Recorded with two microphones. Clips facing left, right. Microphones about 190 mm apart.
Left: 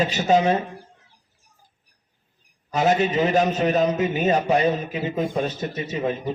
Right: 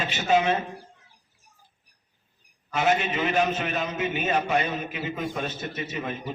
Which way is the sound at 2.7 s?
35° left (ahead or behind).